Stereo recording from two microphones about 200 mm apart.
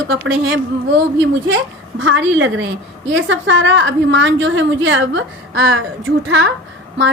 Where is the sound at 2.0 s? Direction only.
75° right (ahead or behind).